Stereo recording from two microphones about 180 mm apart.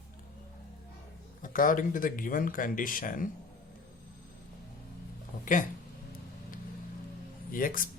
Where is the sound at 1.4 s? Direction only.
50° left (ahead or behind).